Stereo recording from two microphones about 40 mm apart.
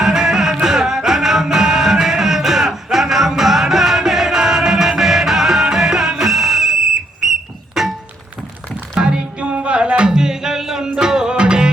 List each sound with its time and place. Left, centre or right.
0.0 s music: centre
7.8 s thunk: centre
9.0 s music: right